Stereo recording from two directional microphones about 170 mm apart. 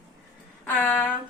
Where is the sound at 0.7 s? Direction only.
10° left (ahead or behind).